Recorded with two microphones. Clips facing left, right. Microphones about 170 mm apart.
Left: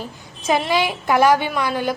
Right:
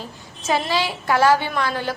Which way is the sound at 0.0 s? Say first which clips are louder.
Left 3 dB; 15° left (ahead or behind).